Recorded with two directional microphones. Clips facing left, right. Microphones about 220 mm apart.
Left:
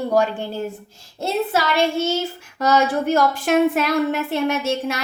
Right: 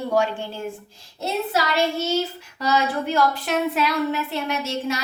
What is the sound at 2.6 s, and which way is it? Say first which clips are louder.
A woman's voice: left 4 dB; 45° left (ahead or behind).